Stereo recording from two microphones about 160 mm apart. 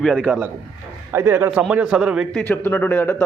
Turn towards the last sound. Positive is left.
turn(degrees=15)  # may be behind; listen again after turning